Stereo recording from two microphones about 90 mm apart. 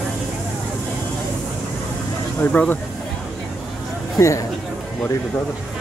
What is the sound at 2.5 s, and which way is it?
Speech, 15° left (ahead or behind).